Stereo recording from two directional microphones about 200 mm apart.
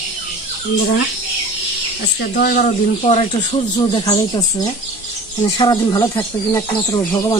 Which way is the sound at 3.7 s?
20° left (ahead or behind).